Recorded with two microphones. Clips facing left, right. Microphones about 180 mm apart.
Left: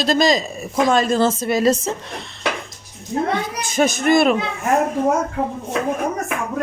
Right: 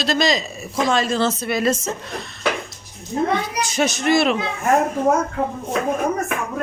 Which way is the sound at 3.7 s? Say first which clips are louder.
Left 3 dB; 50° left (ahead or behind).